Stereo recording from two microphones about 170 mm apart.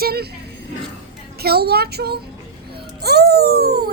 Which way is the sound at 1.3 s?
70° right (ahead or behind).